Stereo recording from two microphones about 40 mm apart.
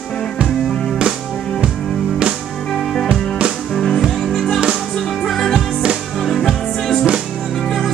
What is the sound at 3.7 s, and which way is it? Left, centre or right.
Music, centre.